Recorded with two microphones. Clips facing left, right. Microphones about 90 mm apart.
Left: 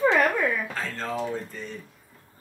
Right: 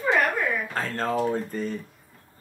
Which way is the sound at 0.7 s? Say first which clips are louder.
Right 4 dB; 45° right (ahead or behind).